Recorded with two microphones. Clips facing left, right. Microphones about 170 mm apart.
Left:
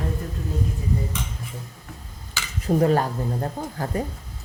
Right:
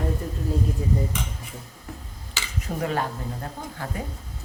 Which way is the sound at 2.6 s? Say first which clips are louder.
Left 8 dB; 35° left (ahead or behind).